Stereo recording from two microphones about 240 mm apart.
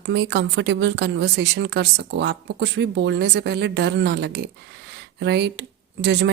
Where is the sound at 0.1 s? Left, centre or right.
Right.